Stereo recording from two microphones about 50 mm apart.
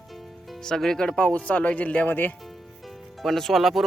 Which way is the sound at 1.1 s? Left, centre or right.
Left.